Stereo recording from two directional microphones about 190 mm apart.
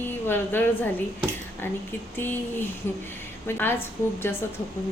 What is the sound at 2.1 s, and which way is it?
A woman's voice, 10° left (ahead or behind).